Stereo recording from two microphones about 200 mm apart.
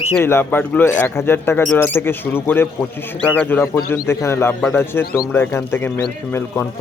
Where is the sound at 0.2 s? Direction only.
10° left (ahead or behind).